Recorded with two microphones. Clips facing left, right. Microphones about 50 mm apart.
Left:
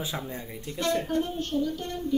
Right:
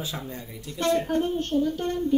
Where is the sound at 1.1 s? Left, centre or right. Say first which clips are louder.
Right 3 dB; right.